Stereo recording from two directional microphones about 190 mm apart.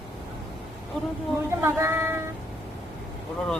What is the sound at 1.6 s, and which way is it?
Speech, 15° right (ahead or behind).